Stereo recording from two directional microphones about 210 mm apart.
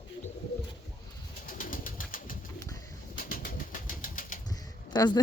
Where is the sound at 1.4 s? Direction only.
40° left (ahead or behind).